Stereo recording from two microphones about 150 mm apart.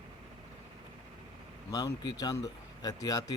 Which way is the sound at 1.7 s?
25° left (ahead or behind).